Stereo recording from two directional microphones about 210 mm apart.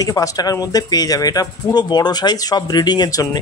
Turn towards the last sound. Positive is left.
turn(degrees=20)  # may be behind; listen again after turning